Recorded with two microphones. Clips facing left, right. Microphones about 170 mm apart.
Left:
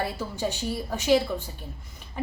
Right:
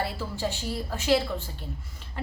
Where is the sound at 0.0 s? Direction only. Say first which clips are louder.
Left 1 dB; 15° left (ahead or behind).